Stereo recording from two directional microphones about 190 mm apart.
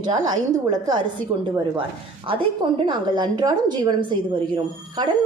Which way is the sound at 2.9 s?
25° right (ahead or behind).